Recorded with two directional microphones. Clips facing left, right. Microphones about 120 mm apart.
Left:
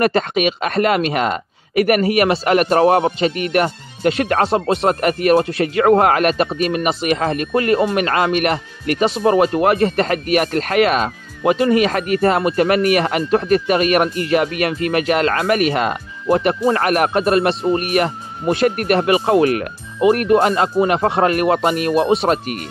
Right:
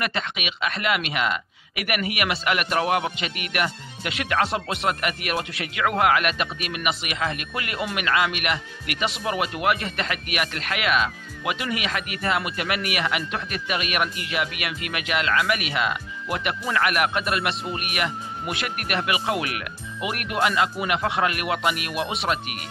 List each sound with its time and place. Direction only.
0.0 s a man's voice: 45° left (ahead or behind)